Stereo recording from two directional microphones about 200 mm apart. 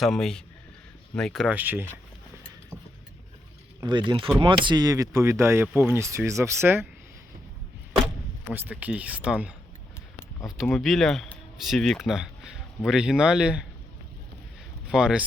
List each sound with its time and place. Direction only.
0.0 s speech: centre (ahead or behind)
3.8 s speech: 20° right (ahead or behind)
8.5 s speech: 10° right (ahead or behind)
14.8 s speech: 5° right (ahead or behind)